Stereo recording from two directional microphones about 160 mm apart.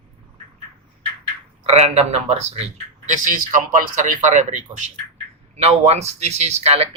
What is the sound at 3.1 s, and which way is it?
Speech, 55° right (ahead or behind).